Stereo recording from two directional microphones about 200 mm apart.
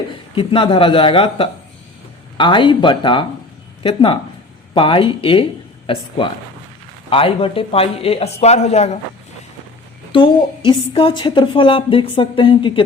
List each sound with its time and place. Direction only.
0.3 s a woman's voice: 25° left (ahead or behind)
10.1 s a woman's voice: 25° left (ahead or behind)